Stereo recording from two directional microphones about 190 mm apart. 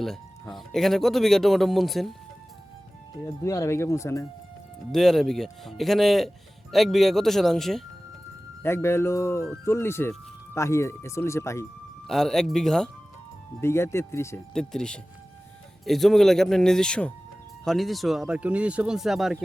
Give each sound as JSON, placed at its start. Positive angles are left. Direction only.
{"t": 0.5, "sound": "speech", "side_deg": 0}
{"t": 3.2, "sound": "speech", "side_deg": 15}
{"t": 4.9, "sound": "speech", "side_deg": 0}
{"t": 8.6, "sound": "speech", "side_deg": 15}
{"t": 12.0, "sound": "speech", "side_deg": 0}
{"t": 13.6, "sound": "speech", "side_deg": 15}
{"t": 14.5, "sound": "speech", "side_deg": 5}